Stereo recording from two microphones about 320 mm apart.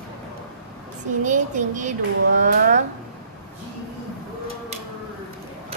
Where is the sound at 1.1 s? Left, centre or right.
Right.